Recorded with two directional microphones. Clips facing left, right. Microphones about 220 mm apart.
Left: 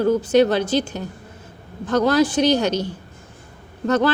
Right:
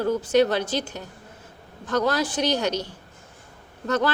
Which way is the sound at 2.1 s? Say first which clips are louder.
Left 9 dB; 25° left (ahead or behind).